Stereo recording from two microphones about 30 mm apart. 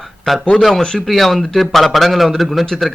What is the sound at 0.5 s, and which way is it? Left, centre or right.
Speech, centre.